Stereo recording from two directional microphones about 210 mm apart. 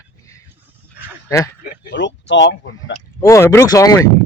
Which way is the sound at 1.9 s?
60° left (ahead or behind).